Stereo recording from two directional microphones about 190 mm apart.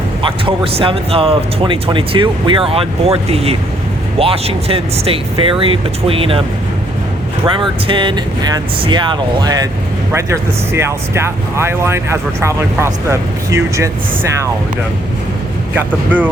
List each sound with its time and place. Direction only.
0.2 s speech: 25° right (ahead or behind)
7.9 s speech: 25° right (ahead or behind)
15.7 s speech: 10° right (ahead or behind)